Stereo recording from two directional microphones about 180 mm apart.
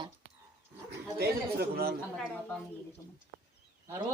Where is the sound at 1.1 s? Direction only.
60° right (ahead or behind).